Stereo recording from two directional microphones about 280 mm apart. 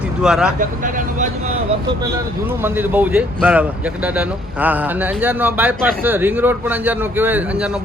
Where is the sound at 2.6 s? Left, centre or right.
Centre.